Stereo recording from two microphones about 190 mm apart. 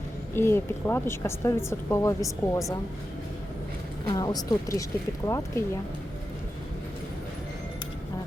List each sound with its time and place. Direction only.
0.3 s speech: 10° left (ahead or behind)
4.1 s speech: 20° left (ahead or behind)